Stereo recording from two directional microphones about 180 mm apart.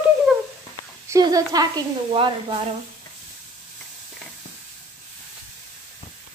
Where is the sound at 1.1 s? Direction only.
20° right (ahead or behind).